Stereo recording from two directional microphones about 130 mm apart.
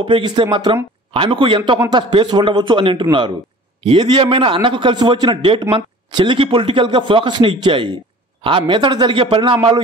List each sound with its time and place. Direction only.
0.0 s a man's voice: 40° right (ahead or behind)